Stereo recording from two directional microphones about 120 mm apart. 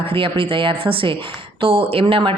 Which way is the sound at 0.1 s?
45° right (ahead or behind).